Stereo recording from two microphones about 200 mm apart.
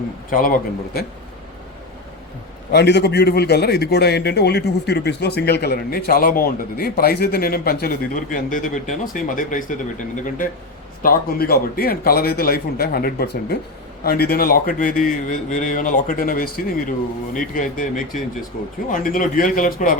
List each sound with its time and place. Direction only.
0.3 s a man's voice: 45° left (ahead or behind)
2.7 s a man's voice: 55° left (ahead or behind)